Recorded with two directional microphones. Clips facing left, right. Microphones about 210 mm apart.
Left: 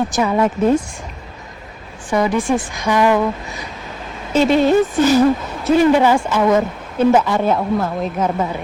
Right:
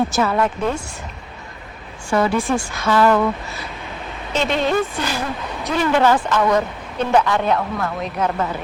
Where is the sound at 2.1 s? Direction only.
15° left (ahead or behind).